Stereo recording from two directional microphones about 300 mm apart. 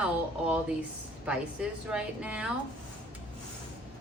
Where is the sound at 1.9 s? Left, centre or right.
Centre.